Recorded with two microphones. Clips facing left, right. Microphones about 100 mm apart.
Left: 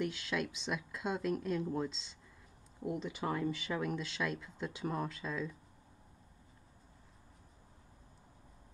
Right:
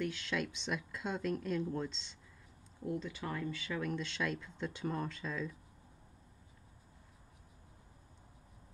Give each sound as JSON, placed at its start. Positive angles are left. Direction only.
{"t": 0.0, "sound": "speech", "side_deg": 10}
{"t": 3.0, "sound": "speech", "side_deg": 25}
{"t": 3.9, "sound": "speech", "side_deg": 5}